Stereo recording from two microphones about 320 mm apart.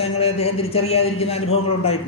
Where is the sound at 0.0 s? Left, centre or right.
Centre.